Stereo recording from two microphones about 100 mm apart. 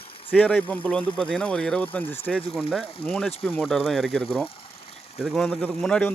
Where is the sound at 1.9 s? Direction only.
20° left (ahead or behind).